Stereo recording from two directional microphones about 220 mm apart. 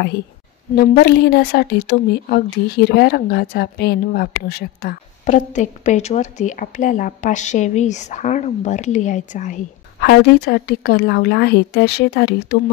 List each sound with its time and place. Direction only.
0.7 s speech: 45° left (ahead or behind)
9.9 s a woman's voice: 45° left (ahead or behind)